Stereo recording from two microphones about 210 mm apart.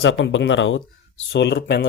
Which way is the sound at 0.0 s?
65° left (ahead or behind).